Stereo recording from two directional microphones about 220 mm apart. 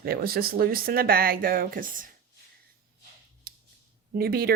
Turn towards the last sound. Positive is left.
turn(degrees=-45)  # may be behind; listen again after turning